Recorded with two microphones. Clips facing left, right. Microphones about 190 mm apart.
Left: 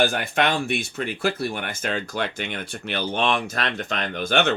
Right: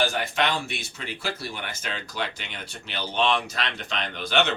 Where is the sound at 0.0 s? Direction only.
55° left (ahead or behind).